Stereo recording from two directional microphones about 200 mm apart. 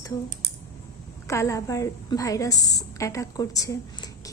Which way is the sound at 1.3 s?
15° left (ahead or behind).